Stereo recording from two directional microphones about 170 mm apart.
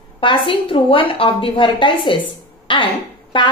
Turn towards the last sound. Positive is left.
turn(degrees=30)  # may be behind; listen again after turning